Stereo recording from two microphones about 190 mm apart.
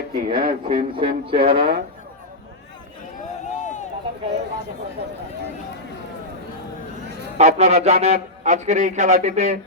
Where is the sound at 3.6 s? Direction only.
40° left (ahead or behind).